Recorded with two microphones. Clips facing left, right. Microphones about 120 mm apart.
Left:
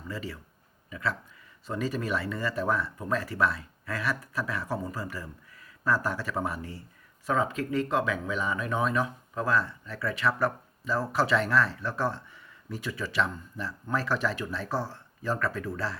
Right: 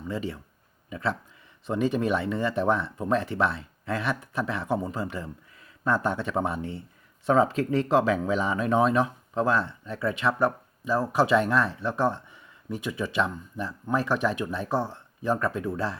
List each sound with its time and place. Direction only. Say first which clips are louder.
0.1 s speech: right 5 dB; 25° right (ahead or behind)